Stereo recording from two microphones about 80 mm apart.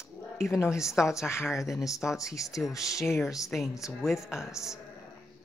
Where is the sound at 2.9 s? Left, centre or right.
Centre.